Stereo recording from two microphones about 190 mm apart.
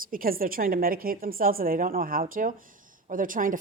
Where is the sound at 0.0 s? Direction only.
50° right (ahead or behind).